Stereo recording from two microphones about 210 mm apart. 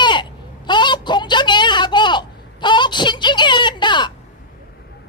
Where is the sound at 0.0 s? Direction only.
20° left (ahead or behind).